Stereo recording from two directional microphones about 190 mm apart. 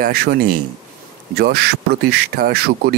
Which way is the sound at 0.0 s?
55° right (ahead or behind).